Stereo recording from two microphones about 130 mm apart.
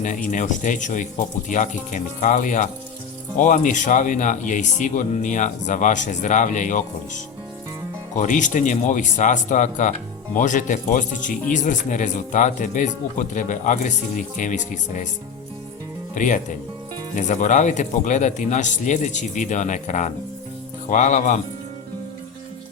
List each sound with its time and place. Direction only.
0.0 s speech: 75° left (ahead or behind)
8.2 s speech: 75° left (ahead or behind)
16.1 s speech: 75° left (ahead or behind)